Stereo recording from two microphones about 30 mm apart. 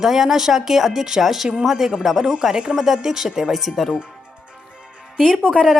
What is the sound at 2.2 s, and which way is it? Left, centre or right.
Speech, right.